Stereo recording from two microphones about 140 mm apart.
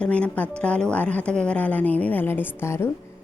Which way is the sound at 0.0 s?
10° left (ahead or behind).